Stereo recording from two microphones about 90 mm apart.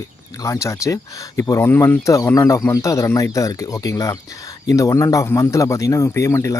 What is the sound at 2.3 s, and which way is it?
Speech, 40° left (ahead or behind).